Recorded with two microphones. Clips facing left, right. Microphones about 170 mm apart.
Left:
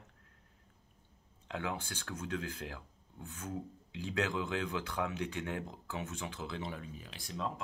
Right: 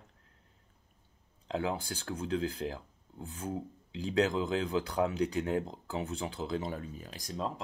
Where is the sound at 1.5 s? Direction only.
35° right (ahead or behind).